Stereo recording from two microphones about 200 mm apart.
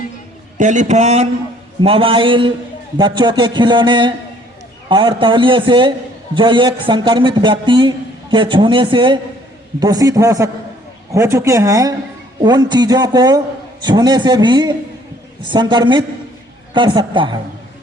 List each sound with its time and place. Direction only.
0.6 s a man's voice: 35° right (ahead or behind)